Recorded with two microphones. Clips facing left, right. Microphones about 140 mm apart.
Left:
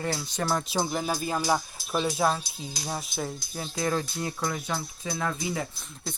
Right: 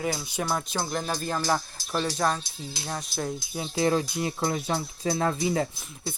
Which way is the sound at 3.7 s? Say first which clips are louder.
Right 4 dB; 25° right (ahead or behind).